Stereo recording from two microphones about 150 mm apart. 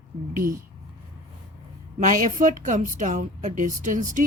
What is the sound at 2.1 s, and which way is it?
A woman's voice, 60° right (ahead or behind).